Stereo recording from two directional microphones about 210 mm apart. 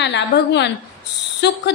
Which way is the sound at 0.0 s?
55° left (ahead or behind).